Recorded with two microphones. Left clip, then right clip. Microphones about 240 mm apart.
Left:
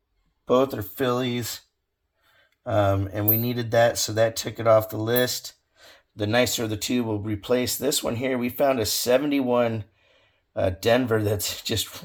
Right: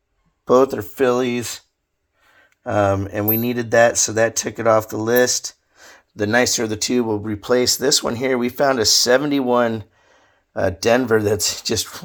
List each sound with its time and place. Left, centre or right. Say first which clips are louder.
0.4 s speech: right 7 dB; right
2.7 s speech: right 5 dB; right
5.7 s a sound: right 7 dB; right
6.7 s speech: right 6 dB; centre
6.9 s speech: right 6 dB; right
7.7 s speech: right 8 dB; centre
8.0 s speech: right 6 dB; right
8.4 s speech: right 4 dB; centre
9.0 s speech: right 5 dB; right
10.8 s speech: right 5 dB; right
11.2 s speech: right 7 dB; centre
11.5 s speech: right 5 dB; right